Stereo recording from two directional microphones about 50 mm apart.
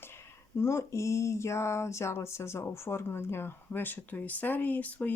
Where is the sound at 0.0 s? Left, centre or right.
Left.